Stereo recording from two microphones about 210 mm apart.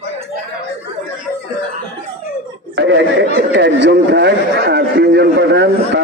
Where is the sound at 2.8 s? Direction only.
55° right (ahead or behind).